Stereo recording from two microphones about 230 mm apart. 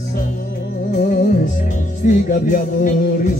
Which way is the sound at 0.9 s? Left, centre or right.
Left.